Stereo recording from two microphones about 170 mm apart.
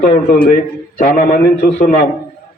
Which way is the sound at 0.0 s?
55° left (ahead or behind).